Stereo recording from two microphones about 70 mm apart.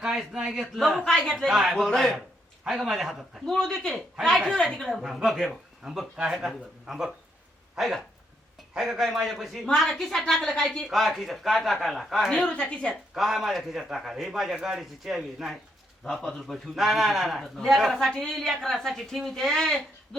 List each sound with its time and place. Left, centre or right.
0.0 s a man's voice: centre
12.3 s a woman's voice: centre
13.1 s a man's voice: centre